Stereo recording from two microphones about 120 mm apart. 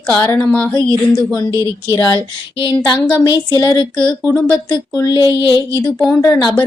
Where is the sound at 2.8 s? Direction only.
35° left (ahead or behind).